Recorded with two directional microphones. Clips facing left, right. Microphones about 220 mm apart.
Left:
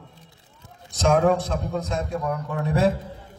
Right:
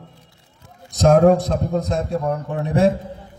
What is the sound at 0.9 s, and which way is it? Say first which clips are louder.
A man's voice: right 6 dB; 40° right (ahead or behind).